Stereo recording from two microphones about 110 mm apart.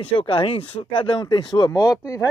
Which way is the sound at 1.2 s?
40° left (ahead or behind).